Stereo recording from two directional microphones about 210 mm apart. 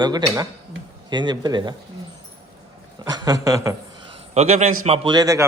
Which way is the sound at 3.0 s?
20° right (ahead or behind).